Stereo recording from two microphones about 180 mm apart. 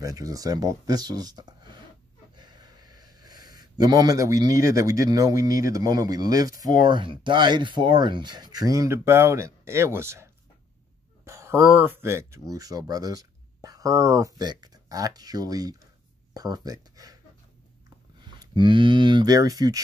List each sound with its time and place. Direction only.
0.0 s speech: 20° right (ahead or behind)
18.2 s speech: 25° right (ahead or behind)